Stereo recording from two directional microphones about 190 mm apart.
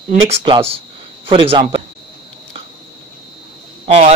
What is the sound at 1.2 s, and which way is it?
Speech, 30° right (ahead or behind).